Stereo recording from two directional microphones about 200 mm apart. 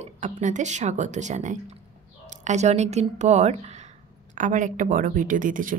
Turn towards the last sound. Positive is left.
turn(degrees=-40)  # may be behind; listen again after turning